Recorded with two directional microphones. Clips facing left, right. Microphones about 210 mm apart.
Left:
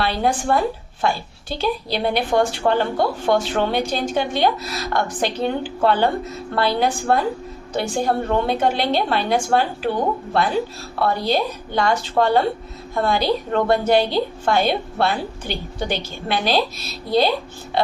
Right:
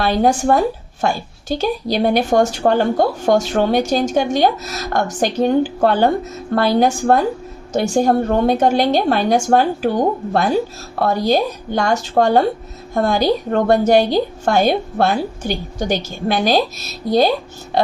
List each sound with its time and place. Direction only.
0.0 s a woman's voice: 45° right (ahead or behind)